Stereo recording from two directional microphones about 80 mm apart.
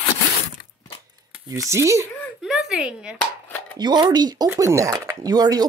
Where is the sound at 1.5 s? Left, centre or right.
Right.